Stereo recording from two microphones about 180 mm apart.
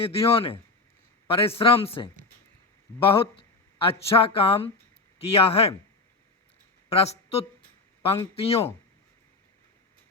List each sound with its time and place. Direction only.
0.0 s speech: 30° left (ahead or behind)
6.9 s speech: 35° left (ahead or behind)